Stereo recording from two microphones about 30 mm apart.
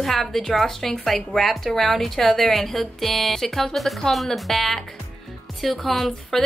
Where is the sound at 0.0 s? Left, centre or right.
Centre.